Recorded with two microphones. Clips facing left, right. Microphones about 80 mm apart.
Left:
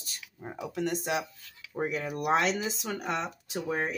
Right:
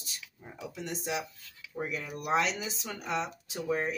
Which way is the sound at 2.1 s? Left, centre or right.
Left.